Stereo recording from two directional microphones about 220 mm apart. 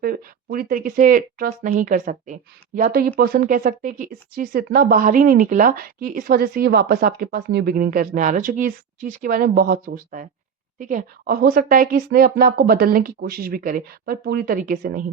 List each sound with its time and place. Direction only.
0.0 s speech: 40° right (ahead or behind)